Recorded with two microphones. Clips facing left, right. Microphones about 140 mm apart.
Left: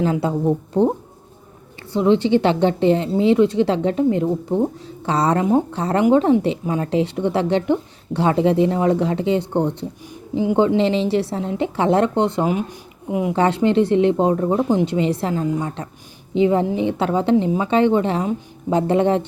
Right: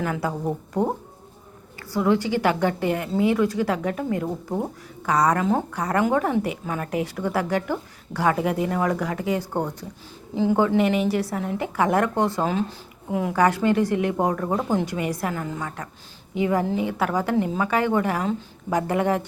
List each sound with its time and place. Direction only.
0.0 s a woman's voice: 25° left (ahead or behind)
1.9 s a woman's voice: 25° left (ahead or behind)